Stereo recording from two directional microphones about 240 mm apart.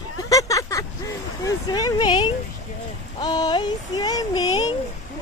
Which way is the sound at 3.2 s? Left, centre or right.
Centre.